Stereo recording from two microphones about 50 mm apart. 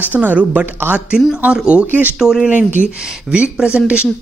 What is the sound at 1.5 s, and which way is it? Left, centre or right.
Speech, right.